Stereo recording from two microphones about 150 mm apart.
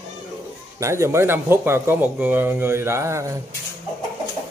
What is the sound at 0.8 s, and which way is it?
A man's voice, 20° right (ahead or behind).